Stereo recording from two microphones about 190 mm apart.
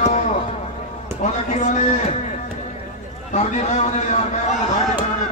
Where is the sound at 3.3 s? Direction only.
35° left (ahead or behind).